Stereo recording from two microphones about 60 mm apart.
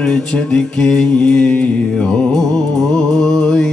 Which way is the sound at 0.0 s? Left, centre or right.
Centre.